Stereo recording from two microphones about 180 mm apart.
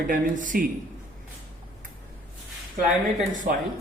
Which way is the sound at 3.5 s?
55° right (ahead or behind).